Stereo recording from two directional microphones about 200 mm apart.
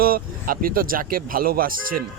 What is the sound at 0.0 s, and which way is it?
Speech, 45° right (ahead or behind).